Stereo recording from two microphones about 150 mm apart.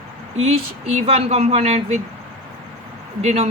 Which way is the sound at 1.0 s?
45° right (ahead or behind).